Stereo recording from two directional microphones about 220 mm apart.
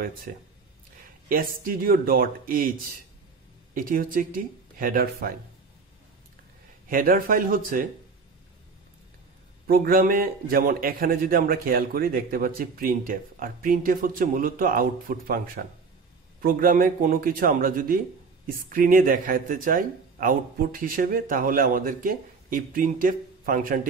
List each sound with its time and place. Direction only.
1.3 s a man's voice: 40° right (ahead or behind)
3.7 s a man's voice: 40° right (ahead or behind)
6.9 s a man's voice: 40° right (ahead or behind)
9.7 s a man's voice: 40° right (ahead or behind)